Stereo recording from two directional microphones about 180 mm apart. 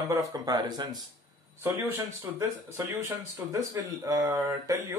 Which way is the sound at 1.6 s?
10° right (ahead or behind).